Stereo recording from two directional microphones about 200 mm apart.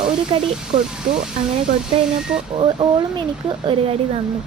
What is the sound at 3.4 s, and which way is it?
Speech, 25° right (ahead or behind).